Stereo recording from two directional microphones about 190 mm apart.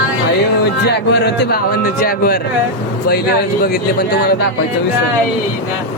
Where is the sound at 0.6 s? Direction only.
60° left (ahead or behind).